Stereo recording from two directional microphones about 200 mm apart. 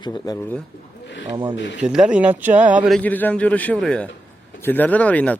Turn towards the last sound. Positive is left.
turn(degrees=5)  # may be behind; listen again after turning